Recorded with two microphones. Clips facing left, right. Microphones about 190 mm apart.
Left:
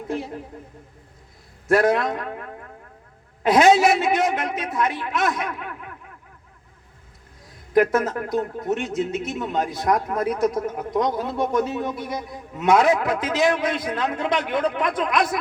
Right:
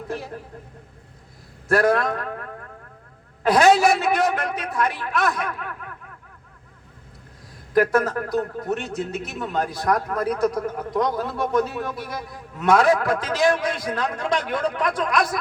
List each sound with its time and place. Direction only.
1.7 s a man's voice: 20° left (ahead or behind)
7.7 s a man's voice: 20° left (ahead or behind)